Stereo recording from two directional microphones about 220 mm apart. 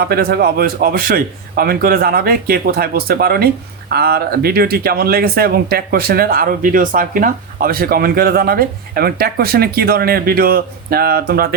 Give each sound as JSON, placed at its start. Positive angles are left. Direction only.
{"t": 0.0, "sound": "a man's voice", "side_deg": -45}